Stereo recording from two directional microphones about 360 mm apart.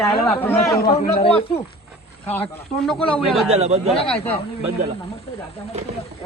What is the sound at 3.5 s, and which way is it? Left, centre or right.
Speech, centre.